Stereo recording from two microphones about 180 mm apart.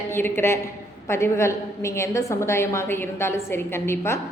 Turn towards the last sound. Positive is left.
turn(degrees=15)  # may be behind; listen again after turning